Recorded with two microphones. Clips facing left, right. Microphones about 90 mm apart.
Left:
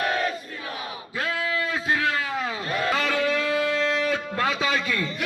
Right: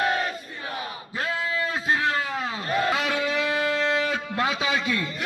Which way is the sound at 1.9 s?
25° right (ahead or behind).